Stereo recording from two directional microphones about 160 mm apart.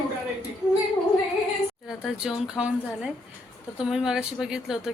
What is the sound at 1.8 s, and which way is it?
Speech, 5° right (ahead or behind).